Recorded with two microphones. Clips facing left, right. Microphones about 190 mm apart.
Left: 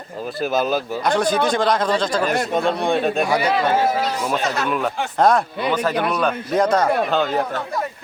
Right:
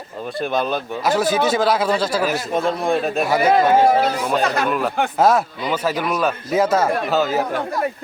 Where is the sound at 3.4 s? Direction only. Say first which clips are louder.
Right 4 dB; 50° right (ahead or behind).